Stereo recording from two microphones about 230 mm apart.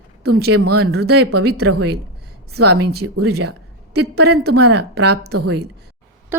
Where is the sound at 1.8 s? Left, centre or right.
Right.